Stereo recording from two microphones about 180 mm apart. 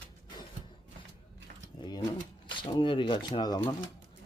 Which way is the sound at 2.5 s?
25° left (ahead or behind).